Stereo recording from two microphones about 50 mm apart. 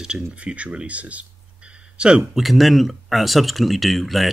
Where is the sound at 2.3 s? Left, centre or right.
Centre.